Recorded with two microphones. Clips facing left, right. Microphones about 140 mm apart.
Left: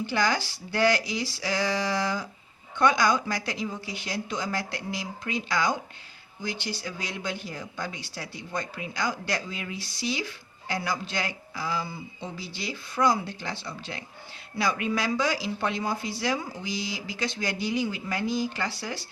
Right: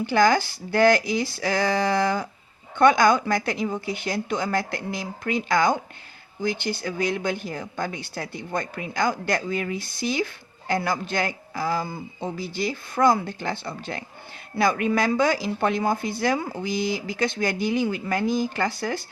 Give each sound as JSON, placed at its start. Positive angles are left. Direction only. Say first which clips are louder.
{"t": 0.0, "sound": "speech", "louder": "right 7 dB", "side_deg": -50}